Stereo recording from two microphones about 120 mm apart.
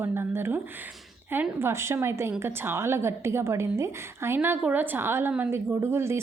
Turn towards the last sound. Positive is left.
turn(degrees=-20)  # may be behind; listen again after turning